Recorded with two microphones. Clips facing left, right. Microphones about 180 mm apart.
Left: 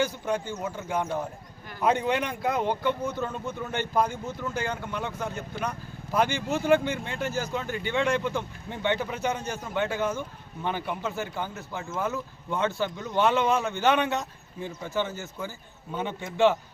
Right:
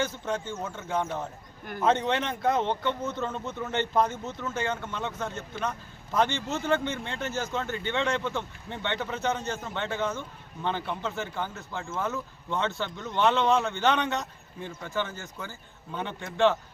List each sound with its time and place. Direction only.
0.6 s speech: 10° left (ahead or behind)